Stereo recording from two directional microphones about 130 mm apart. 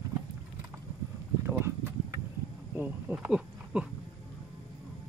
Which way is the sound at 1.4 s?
20° right (ahead or behind).